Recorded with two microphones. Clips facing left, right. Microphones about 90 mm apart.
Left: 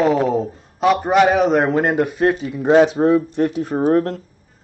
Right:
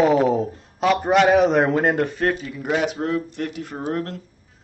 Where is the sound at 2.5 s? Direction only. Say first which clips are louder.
Left 10 dB; 30° left (ahead or behind).